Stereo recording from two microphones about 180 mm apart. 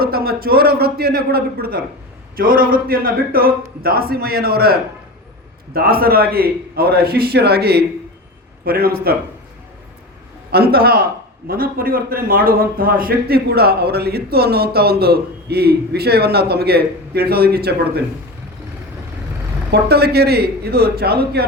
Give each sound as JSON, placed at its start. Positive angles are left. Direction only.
{"t": 0.0, "sound": "a man's voice", "side_deg": -60}
{"t": 10.5, "sound": "a man's voice", "side_deg": -60}
{"t": 19.7, "sound": "a man's voice", "side_deg": -60}